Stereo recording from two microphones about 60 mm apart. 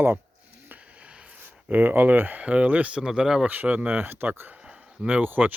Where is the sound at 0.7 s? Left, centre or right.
Right.